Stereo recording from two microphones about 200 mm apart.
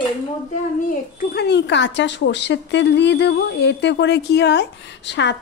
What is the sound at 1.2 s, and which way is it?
A woman's voice, 50° left (ahead or behind).